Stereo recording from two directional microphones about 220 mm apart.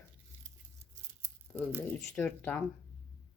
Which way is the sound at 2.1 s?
5° left (ahead or behind).